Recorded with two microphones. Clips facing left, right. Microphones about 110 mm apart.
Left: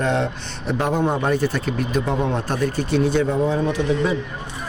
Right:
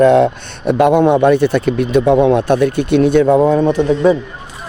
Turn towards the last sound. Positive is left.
turn(degrees=-45)  # may be behind; listen again after turning